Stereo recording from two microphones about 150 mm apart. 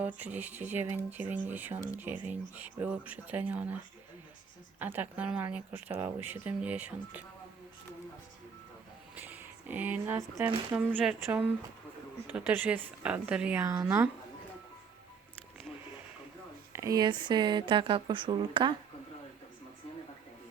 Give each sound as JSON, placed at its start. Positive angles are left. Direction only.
{"t": 0.0, "sound": "speech", "side_deg": -10}
{"t": 4.8, "sound": "speech", "side_deg": -15}
{"t": 9.1, "sound": "a sound", "side_deg": -10}
{"t": 10.7, "sound": "speech", "side_deg": -5}
{"t": 13.7, "sound": "a woman's voice", "side_deg": -20}
{"t": 16.7, "sound": "speech", "side_deg": -20}